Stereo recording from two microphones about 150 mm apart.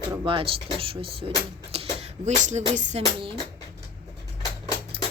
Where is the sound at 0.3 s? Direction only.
35° right (ahead or behind); by 3.0 s 50° right (ahead or behind).